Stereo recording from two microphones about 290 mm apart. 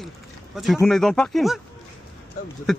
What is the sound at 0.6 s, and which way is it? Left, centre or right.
Speech, centre.